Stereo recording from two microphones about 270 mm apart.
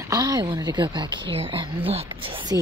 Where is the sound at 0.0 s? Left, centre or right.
Centre.